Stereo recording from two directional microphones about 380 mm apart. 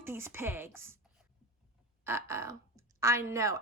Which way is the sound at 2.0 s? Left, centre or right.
Centre.